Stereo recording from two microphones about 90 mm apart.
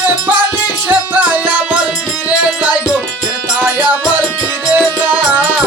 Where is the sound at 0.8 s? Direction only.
20° right (ahead or behind).